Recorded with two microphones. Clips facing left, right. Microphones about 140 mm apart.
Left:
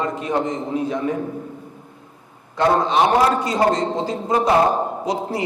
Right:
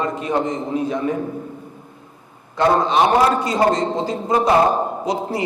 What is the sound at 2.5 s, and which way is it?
A man's voice, 20° right (ahead or behind).